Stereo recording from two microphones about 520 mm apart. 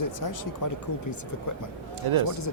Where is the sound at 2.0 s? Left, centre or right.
Right.